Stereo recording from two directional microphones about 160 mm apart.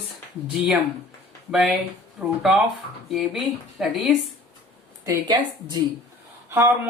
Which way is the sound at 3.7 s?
Centre (ahead or behind).